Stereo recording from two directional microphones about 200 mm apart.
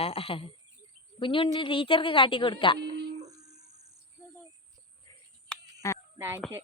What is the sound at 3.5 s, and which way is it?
Cricket, 35° right (ahead or behind).